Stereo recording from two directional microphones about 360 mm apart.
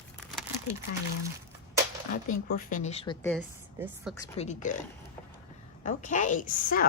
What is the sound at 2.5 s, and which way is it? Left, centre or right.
Speech, left.